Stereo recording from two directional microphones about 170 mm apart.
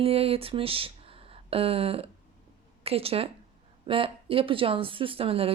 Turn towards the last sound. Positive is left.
turn(degrees=-35)  # may be behind; listen again after turning